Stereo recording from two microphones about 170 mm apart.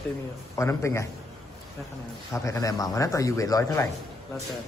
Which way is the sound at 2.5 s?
20° left (ahead or behind).